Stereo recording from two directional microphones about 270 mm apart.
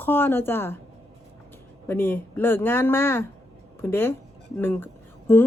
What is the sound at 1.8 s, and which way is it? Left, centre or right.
Speech, centre.